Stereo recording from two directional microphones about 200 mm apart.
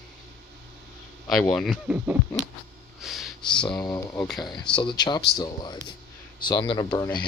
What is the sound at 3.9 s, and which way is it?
Speech, 10° left (ahead or behind).